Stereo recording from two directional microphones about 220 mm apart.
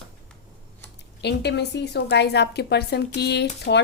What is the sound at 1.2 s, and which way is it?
Speech, 50° left (ahead or behind).